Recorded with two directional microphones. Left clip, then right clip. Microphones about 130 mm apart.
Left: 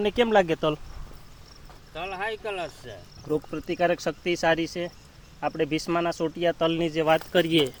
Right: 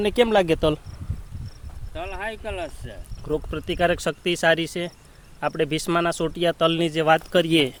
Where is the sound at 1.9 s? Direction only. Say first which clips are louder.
Even; 30° right (ahead or behind).